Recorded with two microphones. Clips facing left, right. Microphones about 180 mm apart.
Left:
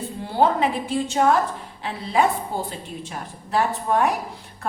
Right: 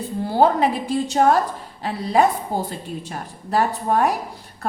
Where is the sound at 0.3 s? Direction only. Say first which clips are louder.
Right 2 dB; 40° right (ahead or behind).